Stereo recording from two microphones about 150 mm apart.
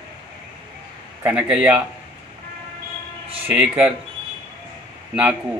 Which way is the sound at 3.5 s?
10° right (ahead or behind).